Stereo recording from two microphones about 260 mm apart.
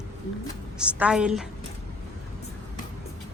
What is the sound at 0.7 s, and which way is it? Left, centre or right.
Speech, centre.